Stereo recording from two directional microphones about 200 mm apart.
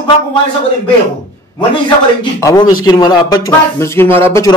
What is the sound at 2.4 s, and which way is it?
A man's voice, 20° left (ahead or behind).